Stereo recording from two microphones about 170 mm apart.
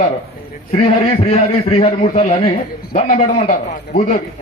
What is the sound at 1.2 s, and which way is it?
A man's voice, 40° left (ahead or behind).